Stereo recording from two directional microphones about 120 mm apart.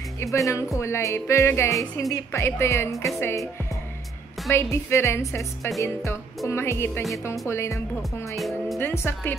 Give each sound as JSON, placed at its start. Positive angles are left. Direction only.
{"t": 0.2, "sound": "speech", "side_deg": 25}
{"t": 4.5, "sound": "speech", "side_deg": 25}
{"t": 8.4, "sound": "music", "side_deg": 0}
{"t": 8.7, "sound": "speech", "side_deg": 20}